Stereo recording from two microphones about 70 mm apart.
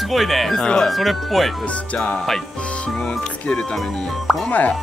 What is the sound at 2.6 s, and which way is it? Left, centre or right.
Music, centre.